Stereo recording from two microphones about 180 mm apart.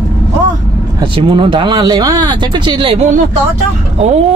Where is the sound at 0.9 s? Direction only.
30° right (ahead or behind).